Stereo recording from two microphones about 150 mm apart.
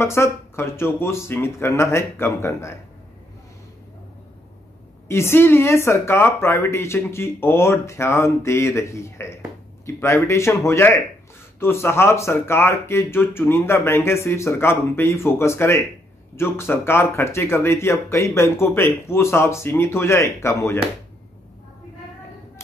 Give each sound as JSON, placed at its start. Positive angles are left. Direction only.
{"t": 0.0, "sound": "speech", "side_deg": 15}
{"t": 5.0, "sound": "speech", "side_deg": 15}